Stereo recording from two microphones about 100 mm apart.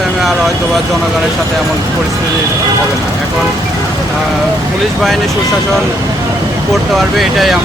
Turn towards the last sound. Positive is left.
turn(degrees=0)  # may be behind; listen again after turning